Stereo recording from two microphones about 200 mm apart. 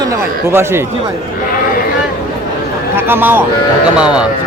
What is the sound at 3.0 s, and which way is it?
Speech, 10° right (ahead or behind).